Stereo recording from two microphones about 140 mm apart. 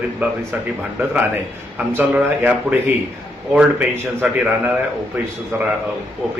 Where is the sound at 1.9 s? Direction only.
15° right (ahead or behind).